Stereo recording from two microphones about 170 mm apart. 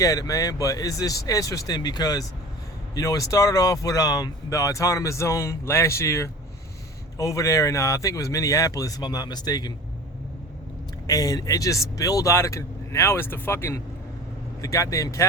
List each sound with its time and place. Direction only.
0.0 s speech: 20° left (ahead or behind)
11.0 s speech: 20° left (ahead or behind)